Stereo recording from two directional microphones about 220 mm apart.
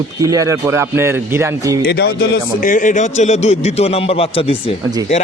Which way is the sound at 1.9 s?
50° left (ahead or behind).